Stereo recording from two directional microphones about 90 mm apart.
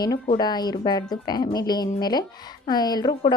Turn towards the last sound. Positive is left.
turn(degrees=50)  # may be behind; listen again after turning